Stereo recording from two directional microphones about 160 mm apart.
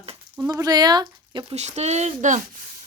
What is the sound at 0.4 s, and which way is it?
Speech, 25° right (ahead or behind).